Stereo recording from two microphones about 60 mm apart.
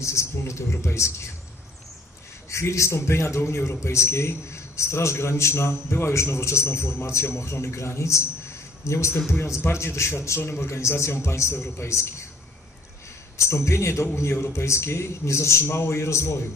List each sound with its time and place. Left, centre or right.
0.0 s speech: left
2.5 s a man's voice: left
13.7 s a man's voice: left